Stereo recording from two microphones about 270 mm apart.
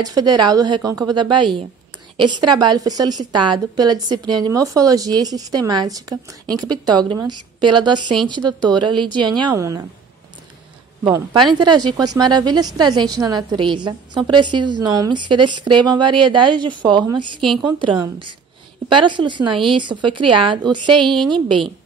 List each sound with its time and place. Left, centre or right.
0.0 s a woman's voice: centre
11.1 s a woman's voice: centre